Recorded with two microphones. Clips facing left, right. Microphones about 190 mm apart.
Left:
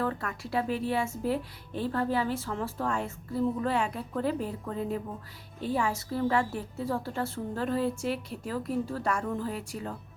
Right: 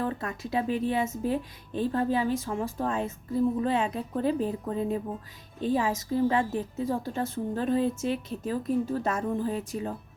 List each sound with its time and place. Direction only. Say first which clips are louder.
0.0 s speech: right 1 dB; 20° right (ahead or behind)